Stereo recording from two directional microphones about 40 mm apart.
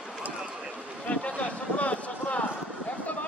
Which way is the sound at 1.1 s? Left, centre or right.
Left.